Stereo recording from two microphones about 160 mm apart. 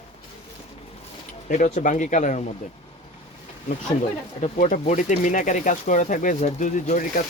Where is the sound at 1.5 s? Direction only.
50° left (ahead or behind).